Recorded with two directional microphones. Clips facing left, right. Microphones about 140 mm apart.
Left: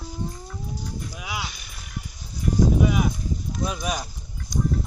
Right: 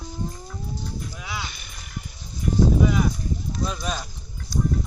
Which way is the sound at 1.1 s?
10° left (ahead or behind).